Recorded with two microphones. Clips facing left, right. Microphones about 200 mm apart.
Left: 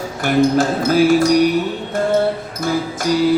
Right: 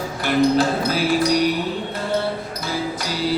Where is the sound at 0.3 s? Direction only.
45° left (ahead or behind).